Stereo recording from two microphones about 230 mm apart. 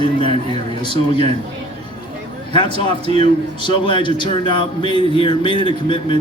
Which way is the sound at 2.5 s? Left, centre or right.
Centre.